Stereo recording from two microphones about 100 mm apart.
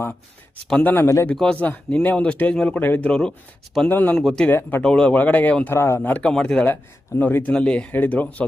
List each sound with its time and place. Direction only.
0.7 s speech: 20° left (ahead or behind)
1.3 s speech: 5° left (ahead or behind)
4.2 s speech: centre (ahead or behind)
4.4 s speech: 20° left (ahead or behind)
4.8 s speech: 10° left (ahead or behind); by 6.0 s 25° left (ahead or behind)
6.0 s speech: 15° left (ahead or behind)